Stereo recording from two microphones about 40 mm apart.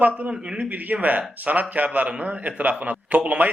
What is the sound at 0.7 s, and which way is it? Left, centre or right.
A man's voice, right.